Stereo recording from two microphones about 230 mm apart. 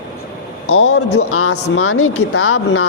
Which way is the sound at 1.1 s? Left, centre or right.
Left.